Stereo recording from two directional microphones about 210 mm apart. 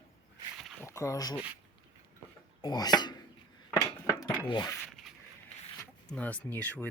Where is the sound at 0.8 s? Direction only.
15° left (ahead or behind).